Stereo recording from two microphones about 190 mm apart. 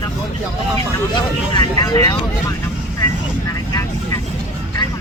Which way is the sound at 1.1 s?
25° left (ahead or behind).